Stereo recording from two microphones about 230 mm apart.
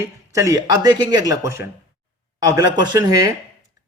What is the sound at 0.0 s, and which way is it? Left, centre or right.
A man's voice, centre.